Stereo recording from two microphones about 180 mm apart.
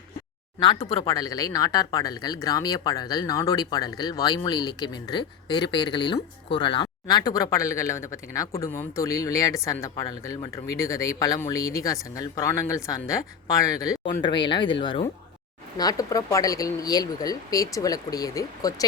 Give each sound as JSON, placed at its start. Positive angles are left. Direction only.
{"t": 0.6, "sound": "speech", "side_deg": 20}